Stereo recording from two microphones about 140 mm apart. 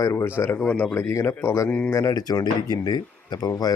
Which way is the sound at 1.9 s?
25° left (ahead or behind).